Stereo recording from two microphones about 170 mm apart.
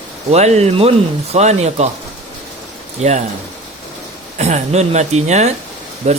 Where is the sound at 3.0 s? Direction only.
40° right (ahead or behind).